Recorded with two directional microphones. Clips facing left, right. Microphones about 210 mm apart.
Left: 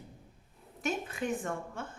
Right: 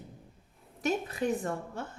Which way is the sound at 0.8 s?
35° right (ahead or behind).